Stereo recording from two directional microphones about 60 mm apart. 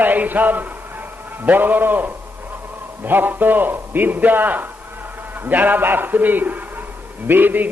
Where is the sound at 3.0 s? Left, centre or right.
Right.